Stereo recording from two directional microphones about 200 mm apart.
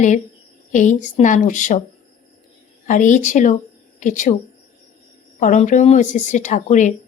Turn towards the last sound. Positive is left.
turn(degrees=35)  # may be behind; listen again after turning